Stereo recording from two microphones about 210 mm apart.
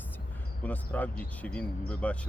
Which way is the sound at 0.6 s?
5° left (ahead or behind).